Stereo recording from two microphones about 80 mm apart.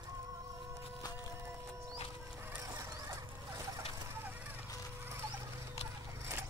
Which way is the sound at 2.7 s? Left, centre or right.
Right.